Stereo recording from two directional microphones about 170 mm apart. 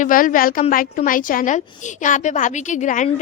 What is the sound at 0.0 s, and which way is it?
A woman's voice, 50° left (ahead or behind).